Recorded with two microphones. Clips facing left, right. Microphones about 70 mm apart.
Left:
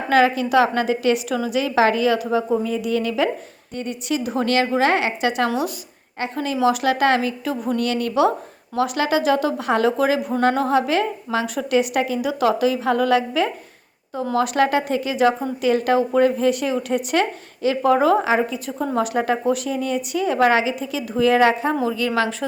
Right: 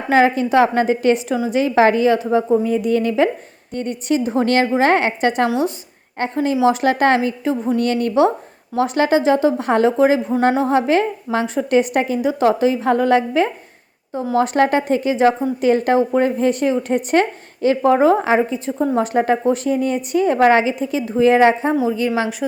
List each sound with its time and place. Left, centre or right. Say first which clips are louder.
0.1 s a woman's voice: right 2 dB; right
4.2 s a woman's voice: right 3 dB; right